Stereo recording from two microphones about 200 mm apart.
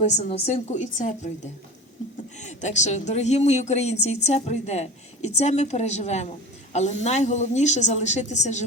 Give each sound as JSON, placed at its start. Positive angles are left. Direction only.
{"t": 0.2, "sound": "a woman's voice", "side_deg": 30}
{"t": 2.4, "sound": "a woman's voice", "side_deg": 35}